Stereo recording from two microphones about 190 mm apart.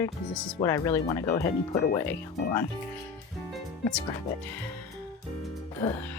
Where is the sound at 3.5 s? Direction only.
Centre (ahead or behind).